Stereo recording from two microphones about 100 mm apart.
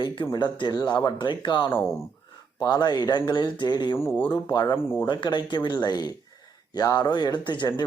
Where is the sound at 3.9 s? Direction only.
20° left (ahead or behind).